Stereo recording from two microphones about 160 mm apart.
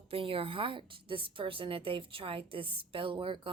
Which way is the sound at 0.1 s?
35° right (ahead or behind).